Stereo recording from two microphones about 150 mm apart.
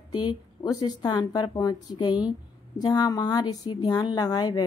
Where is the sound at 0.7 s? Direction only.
25° left (ahead or behind).